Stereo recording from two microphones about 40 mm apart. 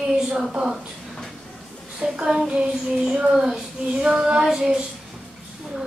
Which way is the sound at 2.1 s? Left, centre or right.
Centre.